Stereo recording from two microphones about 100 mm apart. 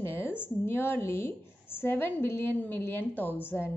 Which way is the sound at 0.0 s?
20° left (ahead or behind).